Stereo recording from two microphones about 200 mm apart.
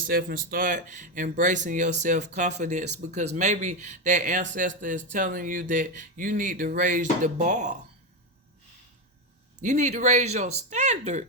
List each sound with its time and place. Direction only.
0.1 s speech: 50° right (ahead or behind)
9.6 s speech: 35° right (ahead or behind)